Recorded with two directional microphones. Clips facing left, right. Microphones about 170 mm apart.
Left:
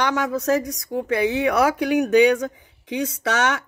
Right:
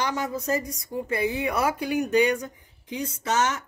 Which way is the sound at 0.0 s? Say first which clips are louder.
Left 6 dB; 70° left (ahead or behind).